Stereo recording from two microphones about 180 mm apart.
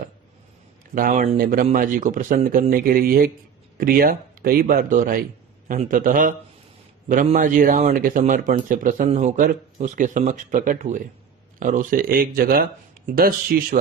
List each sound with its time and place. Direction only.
0.9 s speech: 50° right (ahead or behind)